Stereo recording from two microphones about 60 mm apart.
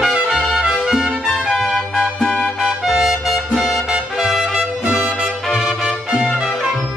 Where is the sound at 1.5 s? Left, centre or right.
Centre.